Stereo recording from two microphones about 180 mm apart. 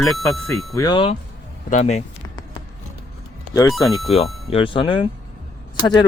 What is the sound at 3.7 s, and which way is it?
Speech, centre (ahead or behind).